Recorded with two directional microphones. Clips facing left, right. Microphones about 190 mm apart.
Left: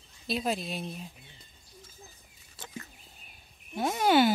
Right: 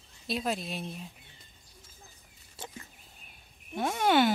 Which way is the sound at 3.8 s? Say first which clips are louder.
Left 1 dB; 5° left (ahead or behind).